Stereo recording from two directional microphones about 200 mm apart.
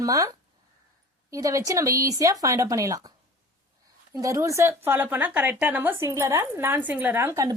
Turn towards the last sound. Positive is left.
turn(degrees=-15)  # may be behind; listen again after turning